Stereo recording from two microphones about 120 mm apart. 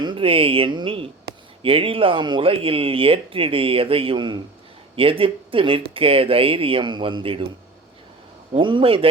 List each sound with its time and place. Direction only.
0.0 s speech: 45° right (ahead or behind)
8.5 s speech: 45° right (ahead or behind)